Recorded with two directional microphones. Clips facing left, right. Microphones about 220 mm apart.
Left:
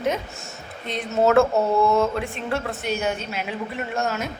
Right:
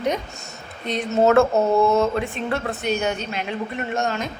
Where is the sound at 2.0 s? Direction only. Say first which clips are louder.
Right 2 dB; centre (ahead or behind).